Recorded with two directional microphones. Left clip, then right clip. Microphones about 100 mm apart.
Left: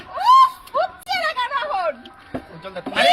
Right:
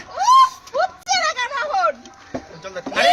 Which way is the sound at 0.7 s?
15° right (ahead or behind).